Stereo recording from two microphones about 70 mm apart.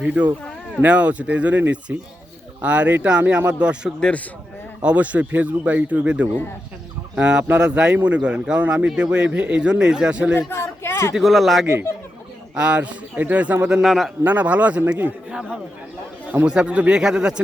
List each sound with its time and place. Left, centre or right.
0.0 s a man's voice: centre
10.5 s a sound: left
11.1 s speech: centre
12.5 s a man's voice: centre
13.8 s speech: centre
14.3 s a man's voice: right